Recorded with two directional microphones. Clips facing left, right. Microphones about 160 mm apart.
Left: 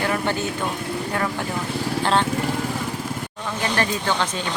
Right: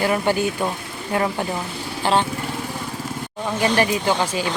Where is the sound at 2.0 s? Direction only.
5° right (ahead or behind).